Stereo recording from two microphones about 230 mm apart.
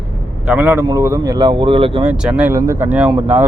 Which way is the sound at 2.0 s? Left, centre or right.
Centre.